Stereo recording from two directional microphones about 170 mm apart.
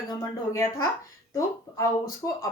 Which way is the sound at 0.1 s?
20° left (ahead or behind).